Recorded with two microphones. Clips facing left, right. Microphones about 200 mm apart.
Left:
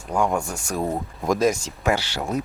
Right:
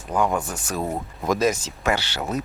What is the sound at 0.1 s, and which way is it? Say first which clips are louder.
Speech: even; centre (ahead or behind).